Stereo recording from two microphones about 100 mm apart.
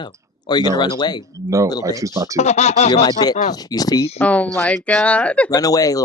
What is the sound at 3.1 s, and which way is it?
Speech, 45° left (ahead or behind).